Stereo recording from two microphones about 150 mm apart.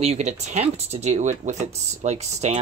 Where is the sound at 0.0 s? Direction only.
50° right (ahead or behind).